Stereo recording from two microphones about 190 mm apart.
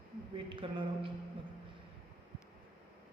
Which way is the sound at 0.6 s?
30° right (ahead or behind).